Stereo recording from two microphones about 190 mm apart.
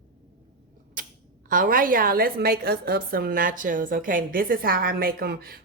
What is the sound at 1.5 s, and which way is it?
A woman's voice, 45° right (ahead or behind).